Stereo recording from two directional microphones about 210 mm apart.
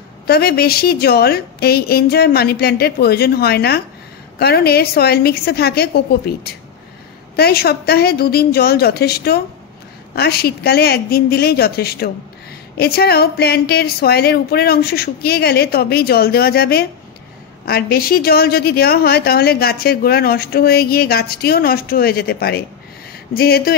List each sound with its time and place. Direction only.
0.3 s a woman's voice: 50° left (ahead or behind)